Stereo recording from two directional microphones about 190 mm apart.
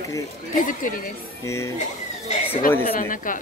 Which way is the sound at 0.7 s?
45° left (ahead or behind).